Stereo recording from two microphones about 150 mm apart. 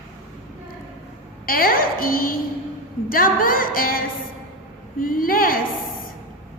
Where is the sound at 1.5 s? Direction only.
75° left (ahead or behind).